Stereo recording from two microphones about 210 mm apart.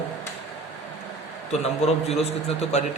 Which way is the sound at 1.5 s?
30° left (ahead or behind).